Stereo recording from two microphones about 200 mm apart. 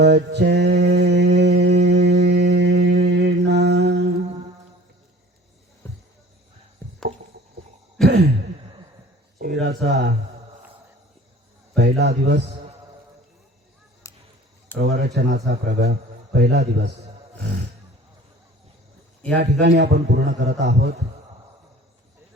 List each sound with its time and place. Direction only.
0.0 s mantra: 55° right (ahead or behind)
5.8 s music: 10° left (ahead or behind)
6.8 s chop: 10° left (ahead or behind)
8.0 s sigh: 55° right (ahead or behind)
9.4 s a sound: 55° right (ahead or behind)
11.8 s a man's voice: 55° right (ahead or behind)
14.0 s basketball bounce: 15° left (ahead or behind)
14.8 s a man's voice: 55° right (ahead or behind)
19.3 s a man's voice: 55° right (ahead or behind)